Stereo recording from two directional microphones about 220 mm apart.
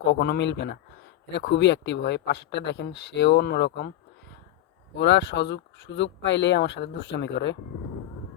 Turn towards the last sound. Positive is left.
turn(degrees=55)  # may be behind; listen again after turning